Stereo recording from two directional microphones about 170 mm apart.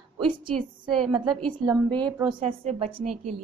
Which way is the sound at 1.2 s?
30° right (ahead or behind).